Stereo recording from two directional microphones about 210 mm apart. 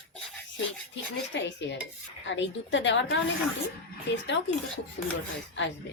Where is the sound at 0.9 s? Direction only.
60° left (ahead or behind).